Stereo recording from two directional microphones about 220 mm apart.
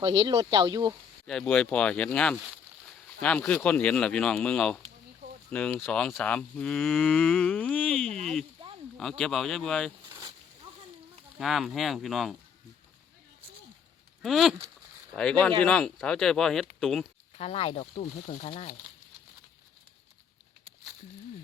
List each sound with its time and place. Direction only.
0.0 s speech: 20° right (ahead or behind)
1.3 s speech: 5° left (ahead or behind)
8.0 s speech: 30° right (ahead or behind)
9.0 s speech: centre (ahead or behind)
10.1 s a sound: 20° right (ahead or behind)
11.3 s speech: centre (ahead or behind)
14.2 s speech: centre (ahead or behind)
17.3 s speech: 25° left (ahead or behind)